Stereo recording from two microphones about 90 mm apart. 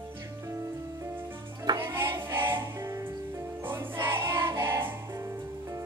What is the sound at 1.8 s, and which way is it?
Music, 25° right (ahead or behind).